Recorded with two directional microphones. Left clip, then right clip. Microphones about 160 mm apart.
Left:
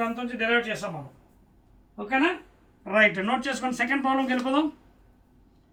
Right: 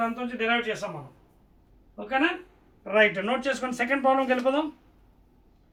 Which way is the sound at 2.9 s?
20° right (ahead or behind).